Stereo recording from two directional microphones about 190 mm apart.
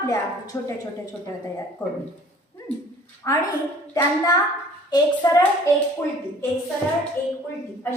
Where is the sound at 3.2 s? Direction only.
15° left (ahead or behind).